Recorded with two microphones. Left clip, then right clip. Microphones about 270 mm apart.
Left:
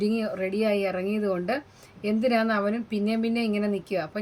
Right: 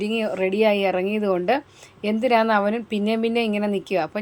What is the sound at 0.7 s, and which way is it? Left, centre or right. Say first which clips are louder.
Speech: right 5 dB; centre.